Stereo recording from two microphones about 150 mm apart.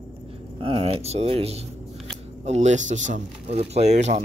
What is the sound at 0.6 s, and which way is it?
Speech, 40° right (ahead or behind).